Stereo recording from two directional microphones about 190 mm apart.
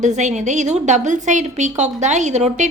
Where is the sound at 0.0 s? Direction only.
40° right (ahead or behind).